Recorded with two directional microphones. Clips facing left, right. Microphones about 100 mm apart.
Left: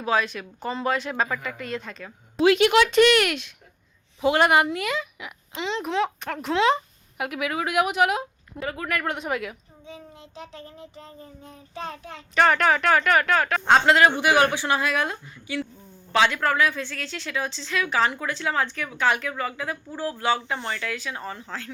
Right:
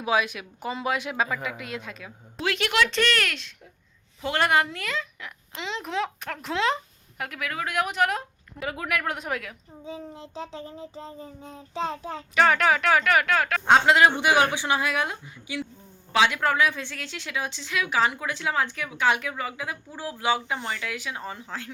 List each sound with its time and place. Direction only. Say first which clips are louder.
0.0 s a woman's voice: left 1 dB; 10° right (ahead or behind)
2.4 s speech: left 7 dB; 20° left (ahead or behind)
5.5 s speech: left 4 dB; centre (ahead or behind)
7.2 s speech: left 4 dB; 15° left (ahead or behind)
8.6 s speech: left 1 dB; 10° right (ahead or behind)
9.8 s child singing: right 5 dB; 30° right (ahead or behind)
12.3 s speech: left 1 dB; centre (ahead or behind)
13.8 s a woman's voice: left 1 dB; 15° right (ahead or behind)